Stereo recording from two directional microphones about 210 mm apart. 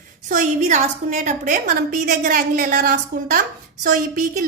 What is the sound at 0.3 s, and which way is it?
A woman's voice, 35° right (ahead or behind).